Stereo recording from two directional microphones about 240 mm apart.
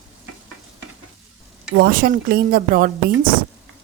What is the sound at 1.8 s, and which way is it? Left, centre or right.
Speech, right.